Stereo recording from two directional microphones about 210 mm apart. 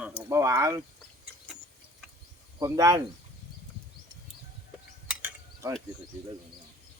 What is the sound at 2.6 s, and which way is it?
Speech, 15° right (ahead or behind).